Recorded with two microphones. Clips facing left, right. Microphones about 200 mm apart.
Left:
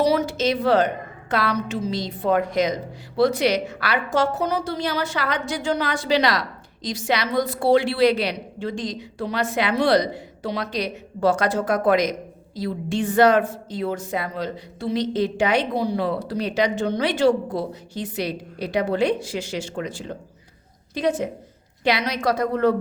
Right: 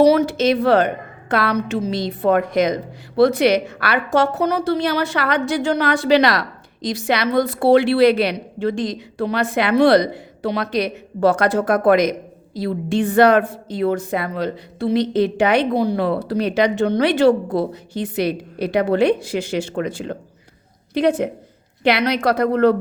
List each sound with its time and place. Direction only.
0.0 s a woman's voice: 60° right (ahead or behind)